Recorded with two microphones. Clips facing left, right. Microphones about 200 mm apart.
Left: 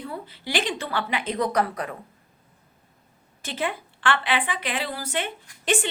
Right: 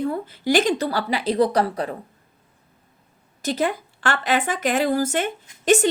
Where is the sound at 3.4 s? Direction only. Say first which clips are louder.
Right 6 dB; 40° right (ahead or behind).